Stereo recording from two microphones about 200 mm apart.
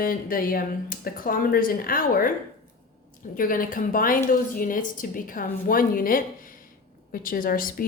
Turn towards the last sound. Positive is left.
turn(degrees=45)  # may be behind; listen again after turning